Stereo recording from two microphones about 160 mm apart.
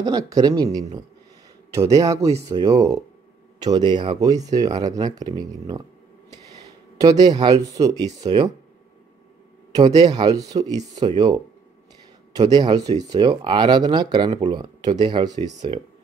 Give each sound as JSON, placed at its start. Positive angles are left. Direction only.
{"t": 0.0, "sound": "speech", "side_deg": -25}
{"t": 7.0, "sound": "speech", "side_deg": -25}
{"t": 9.8, "sound": "speech", "side_deg": -25}